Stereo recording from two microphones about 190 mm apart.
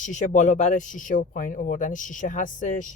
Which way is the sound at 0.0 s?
40° left (ahead or behind).